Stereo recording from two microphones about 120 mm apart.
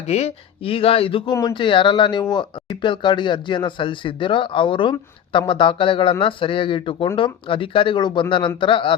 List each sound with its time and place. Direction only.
0.1 s speech: 60° left (ahead or behind)